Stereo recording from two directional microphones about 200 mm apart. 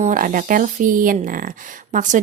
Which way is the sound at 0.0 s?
40° right (ahead or behind).